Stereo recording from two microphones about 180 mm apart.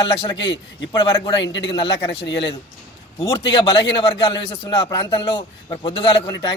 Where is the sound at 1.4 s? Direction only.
80° left.